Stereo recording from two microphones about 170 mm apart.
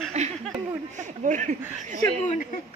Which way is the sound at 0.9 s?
45° right (ahead or behind).